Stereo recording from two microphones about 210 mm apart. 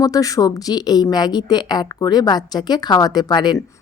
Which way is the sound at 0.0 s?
15° left (ahead or behind).